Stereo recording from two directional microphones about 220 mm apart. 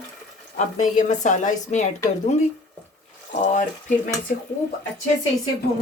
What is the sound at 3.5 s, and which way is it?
Speech, 35° left (ahead or behind).